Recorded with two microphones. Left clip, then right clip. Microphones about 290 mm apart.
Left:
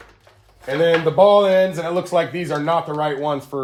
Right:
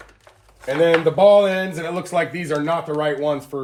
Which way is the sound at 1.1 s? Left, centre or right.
Centre.